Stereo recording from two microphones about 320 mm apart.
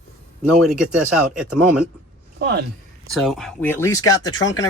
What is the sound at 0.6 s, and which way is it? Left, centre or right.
Speech, centre.